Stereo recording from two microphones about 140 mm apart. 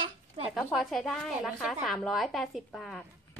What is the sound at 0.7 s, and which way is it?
A woman's voice, centre (ahead or behind).